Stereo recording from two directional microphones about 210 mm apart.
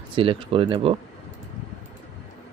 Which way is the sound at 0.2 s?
25° right (ahead or behind).